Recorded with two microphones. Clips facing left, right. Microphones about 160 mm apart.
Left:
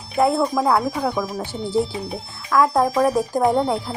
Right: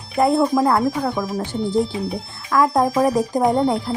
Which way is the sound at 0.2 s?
Centre (ahead or behind).